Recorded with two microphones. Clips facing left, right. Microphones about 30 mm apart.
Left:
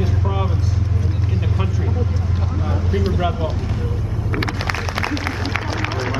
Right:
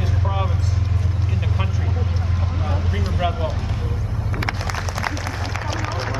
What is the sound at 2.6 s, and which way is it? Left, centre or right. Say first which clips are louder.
Vehicle: left 5 dB; centre.